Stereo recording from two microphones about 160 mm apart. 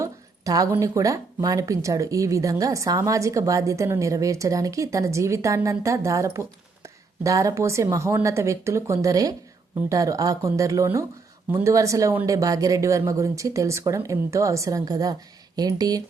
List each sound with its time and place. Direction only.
0.0 s speech: 20° right (ahead or behind)